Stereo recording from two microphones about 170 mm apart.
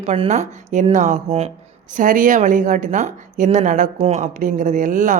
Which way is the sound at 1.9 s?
55° right (ahead or behind).